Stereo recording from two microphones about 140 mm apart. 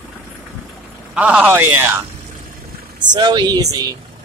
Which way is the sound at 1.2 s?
10° right (ahead or behind).